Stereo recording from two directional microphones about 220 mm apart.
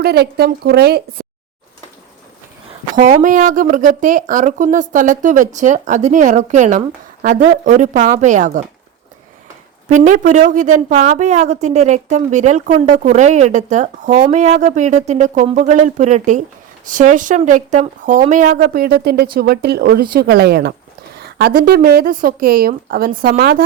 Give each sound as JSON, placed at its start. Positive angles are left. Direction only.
{"t": 0.0, "sound": "speech", "side_deg": -45}
{"t": 2.9, "sound": "speech", "side_deg": -35}
{"t": 9.9, "sound": "speech", "side_deg": -35}